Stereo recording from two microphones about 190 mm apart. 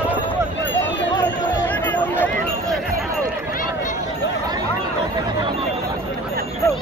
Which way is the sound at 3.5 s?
45° left (ahead or behind).